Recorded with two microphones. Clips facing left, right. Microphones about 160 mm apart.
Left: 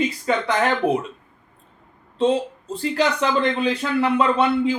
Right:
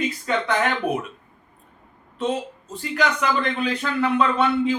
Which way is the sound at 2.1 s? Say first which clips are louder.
Left 6 dB; 30° left (ahead or behind).